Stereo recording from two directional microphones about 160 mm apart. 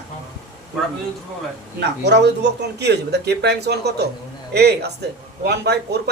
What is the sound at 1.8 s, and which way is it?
Speech, 90° right.